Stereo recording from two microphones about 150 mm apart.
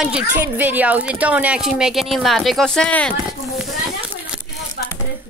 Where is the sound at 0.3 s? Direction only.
10° right (ahead or behind); by 3.2 s 5° left (ahead or behind).